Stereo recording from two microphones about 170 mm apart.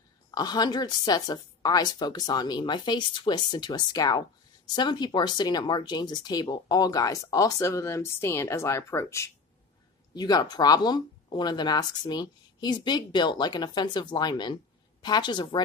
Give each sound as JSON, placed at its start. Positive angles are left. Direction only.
{"t": 0.3, "sound": "speech", "side_deg": 25}